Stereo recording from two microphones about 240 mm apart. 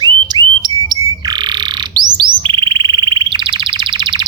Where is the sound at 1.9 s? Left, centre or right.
Centre.